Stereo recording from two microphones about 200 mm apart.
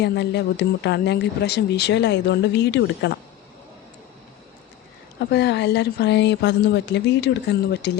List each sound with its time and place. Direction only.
0.0 s speech: 60° left (ahead or behind)
5.2 s speech: 60° left (ahead or behind)